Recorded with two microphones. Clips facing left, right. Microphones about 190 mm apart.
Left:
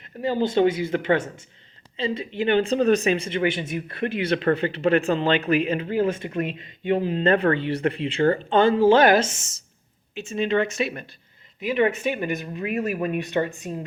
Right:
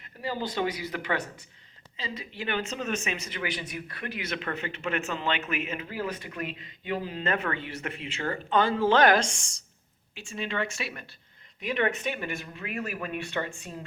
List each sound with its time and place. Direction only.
0.2 s speech: 25° left (ahead or behind)
8.8 s a woman's voice: 10° left (ahead or behind)
10.2 s speech: 20° left (ahead or behind)
11.6 s speech: 5° left (ahead or behind)